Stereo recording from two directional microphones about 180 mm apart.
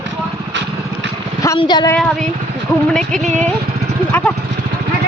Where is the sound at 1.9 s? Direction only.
5° left (ahead or behind).